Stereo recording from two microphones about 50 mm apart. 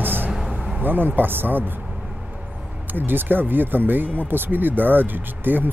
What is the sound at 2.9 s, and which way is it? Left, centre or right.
Speech, right.